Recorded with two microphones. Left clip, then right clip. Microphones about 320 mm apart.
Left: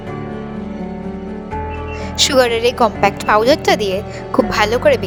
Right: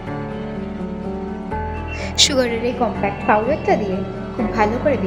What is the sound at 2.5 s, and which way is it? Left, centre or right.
A woman's voice, left.